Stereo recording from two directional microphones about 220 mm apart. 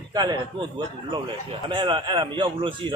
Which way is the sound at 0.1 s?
20° right (ahead or behind).